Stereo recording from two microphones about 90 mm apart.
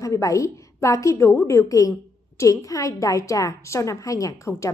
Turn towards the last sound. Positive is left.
turn(degrees=35)  # may be behind; listen again after turning